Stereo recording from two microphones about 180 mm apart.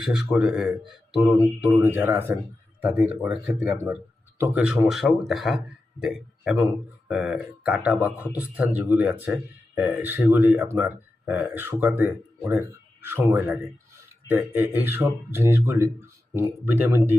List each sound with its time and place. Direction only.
0.0 s a man's voice: 5° right (ahead or behind)